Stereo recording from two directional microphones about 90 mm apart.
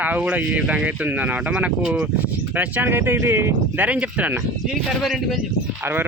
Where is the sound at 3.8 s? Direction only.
15° right (ahead or behind).